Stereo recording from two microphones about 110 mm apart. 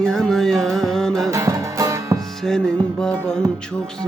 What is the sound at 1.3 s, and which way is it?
Music, 30° right (ahead or behind).